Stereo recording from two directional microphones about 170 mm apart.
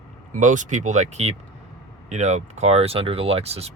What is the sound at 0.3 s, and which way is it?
Speech, 45° right (ahead or behind).